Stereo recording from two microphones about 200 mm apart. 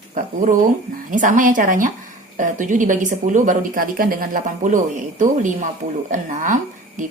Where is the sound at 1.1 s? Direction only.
40° right (ahead or behind).